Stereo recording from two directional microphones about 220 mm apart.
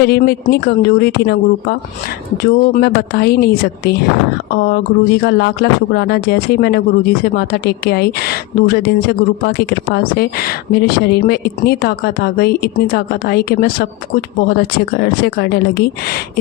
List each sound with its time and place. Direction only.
0.0 s speech: 45° left (ahead or behind)